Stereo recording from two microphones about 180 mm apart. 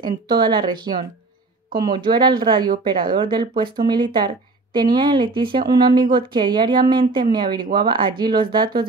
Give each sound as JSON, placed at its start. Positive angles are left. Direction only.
{"t": 0.0, "sound": "speech", "side_deg": -25}